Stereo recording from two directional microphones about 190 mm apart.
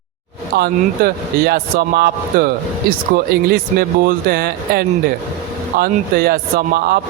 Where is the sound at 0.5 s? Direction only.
55° right (ahead or behind).